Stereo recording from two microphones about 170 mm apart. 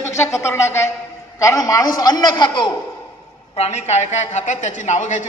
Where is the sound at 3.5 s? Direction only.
40° left (ahead or behind).